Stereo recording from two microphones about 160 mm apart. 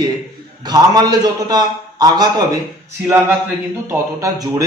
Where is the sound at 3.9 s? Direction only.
20° right (ahead or behind).